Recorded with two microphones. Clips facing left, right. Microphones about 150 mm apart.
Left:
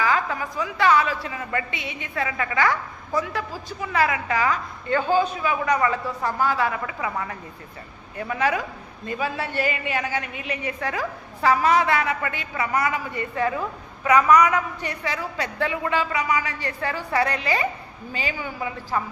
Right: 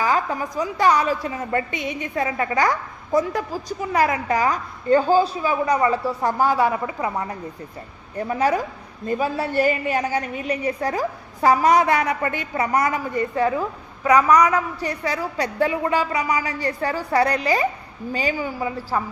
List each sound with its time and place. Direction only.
0.0 s a woman's voice: 40° right (ahead or behind)
13.4 s a woman's voice: 10° right (ahead or behind)
14.1 s a woman's voice: 35° right (ahead or behind)